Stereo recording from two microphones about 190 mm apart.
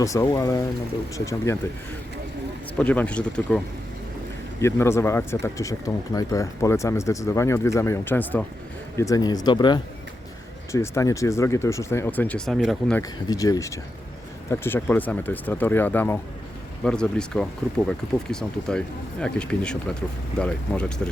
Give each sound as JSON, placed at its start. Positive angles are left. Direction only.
{"t": 0.0, "sound": "speech", "side_deg": 15}
{"t": 2.7, "sound": "speech", "side_deg": 10}
{"t": 4.6, "sound": "speech", "side_deg": 15}
{"t": 13.0, "sound": "speech", "side_deg": 20}